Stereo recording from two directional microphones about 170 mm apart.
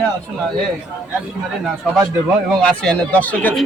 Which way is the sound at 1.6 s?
Centre (ahead or behind).